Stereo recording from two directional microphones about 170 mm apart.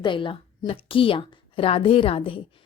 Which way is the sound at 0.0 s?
30° left (ahead or behind).